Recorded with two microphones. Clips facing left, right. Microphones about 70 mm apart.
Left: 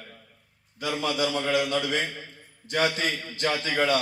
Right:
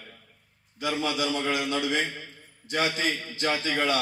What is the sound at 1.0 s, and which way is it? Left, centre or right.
A man's voice, left.